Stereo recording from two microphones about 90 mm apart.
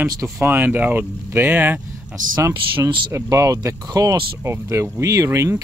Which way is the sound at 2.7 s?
65° right (ahead or behind).